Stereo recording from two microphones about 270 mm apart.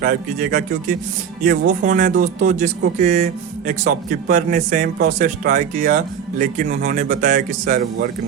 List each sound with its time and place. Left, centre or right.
0.0 s speech: right